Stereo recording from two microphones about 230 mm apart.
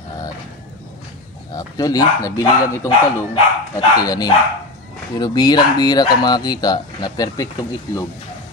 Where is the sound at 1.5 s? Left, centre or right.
Centre.